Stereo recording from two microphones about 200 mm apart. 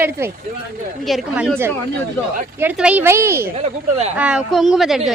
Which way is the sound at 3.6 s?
30° right (ahead or behind).